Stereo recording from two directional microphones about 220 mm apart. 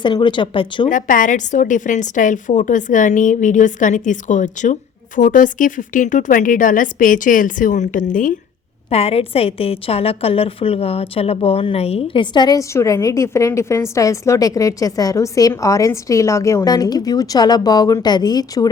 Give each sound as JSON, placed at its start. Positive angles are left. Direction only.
{"t": 0.0, "sound": "speech", "side_deg": 20}
{"t": 0.9, "sound": "a woman's voice", "side_deg": 35}